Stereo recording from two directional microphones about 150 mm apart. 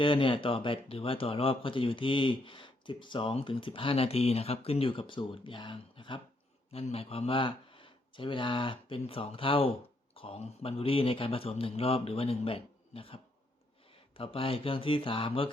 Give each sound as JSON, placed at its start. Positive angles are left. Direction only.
{"t": 0.0, "sound": "speech", "side_deg": 35}
{"t": 14.2, "sound": "speech", "side_deg": 40}